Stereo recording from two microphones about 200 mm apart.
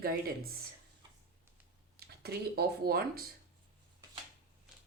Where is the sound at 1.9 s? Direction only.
50° right (ahead or behind).